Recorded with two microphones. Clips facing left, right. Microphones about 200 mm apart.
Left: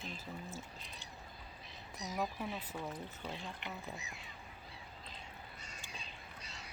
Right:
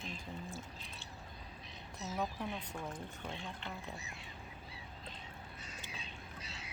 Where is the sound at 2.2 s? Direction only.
Centre (ahead or behind).